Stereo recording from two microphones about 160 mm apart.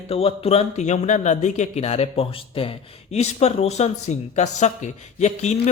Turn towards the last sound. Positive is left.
turn(degrees=45)  # may be behind; listen again after turning